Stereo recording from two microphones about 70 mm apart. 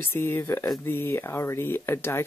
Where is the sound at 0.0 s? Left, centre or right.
Left.